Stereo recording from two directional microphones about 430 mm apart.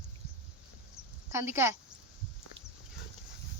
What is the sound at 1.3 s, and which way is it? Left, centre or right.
Speech, centre.